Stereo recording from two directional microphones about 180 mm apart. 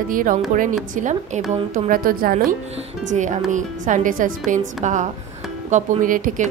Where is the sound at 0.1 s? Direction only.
50° right (ahead or behind).